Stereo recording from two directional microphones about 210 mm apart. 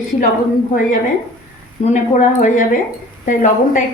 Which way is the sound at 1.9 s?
35° left (ahead or behind).